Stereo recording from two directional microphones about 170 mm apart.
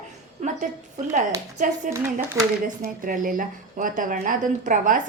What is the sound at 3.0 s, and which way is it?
A woman's voice, 50° right (ahead or behind).